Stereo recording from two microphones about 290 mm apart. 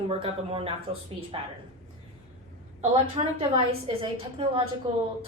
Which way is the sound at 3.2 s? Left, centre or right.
Right.